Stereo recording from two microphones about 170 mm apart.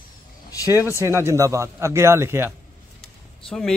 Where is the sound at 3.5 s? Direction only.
5° left (ahead or behind).